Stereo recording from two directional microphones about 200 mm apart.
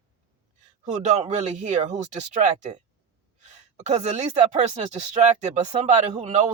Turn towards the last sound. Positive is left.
turn(degrees=-35)  # may be behind; listen again after turning